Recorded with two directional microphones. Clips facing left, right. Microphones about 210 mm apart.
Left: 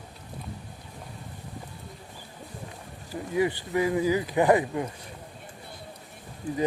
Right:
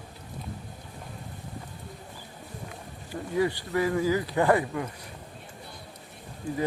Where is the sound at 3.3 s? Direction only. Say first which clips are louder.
Left 1 dB; 15° left (ahead or behind).